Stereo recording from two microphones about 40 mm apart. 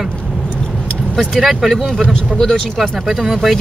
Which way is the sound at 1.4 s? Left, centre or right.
Centre.